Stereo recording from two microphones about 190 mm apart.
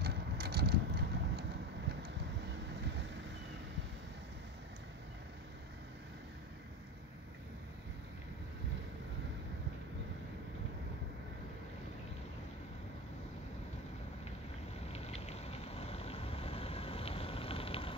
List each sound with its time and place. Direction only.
0.0 s vehicle: 55° right (ahead or behind)
14.9 s vehicle: 35° left (ahead or behind)